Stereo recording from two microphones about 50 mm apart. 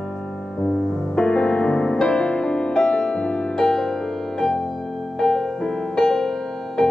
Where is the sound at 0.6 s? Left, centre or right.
Centre.